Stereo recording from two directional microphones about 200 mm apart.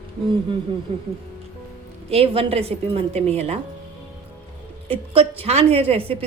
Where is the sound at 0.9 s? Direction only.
30° right (ahead or behind).